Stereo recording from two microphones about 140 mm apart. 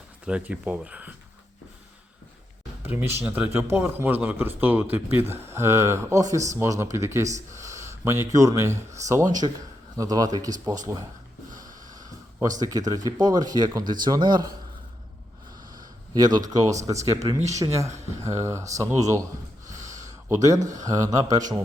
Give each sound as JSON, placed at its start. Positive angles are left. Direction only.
{"t": 0.3, "sound": "a man's voice", "side_deg": -10}
{"t": 2.8, "sound": "a man's voice", "side_deg": -15}
{"t": 11.5, "sound": "snort", "side_deg": -65}
{"t": 12.4, "sound": "a man's voice", "side_deg": -25}
{"t": 16.1, "sound": "speech", "side_deg": -30}
{"t": 19.6, "sound": "a sound", "side_deg": -60}
{"t": 20.1, "sound": "speech", "side_deg": -20}